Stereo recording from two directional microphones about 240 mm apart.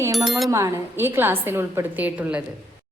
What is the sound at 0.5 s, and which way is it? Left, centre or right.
A woman's voice, centre.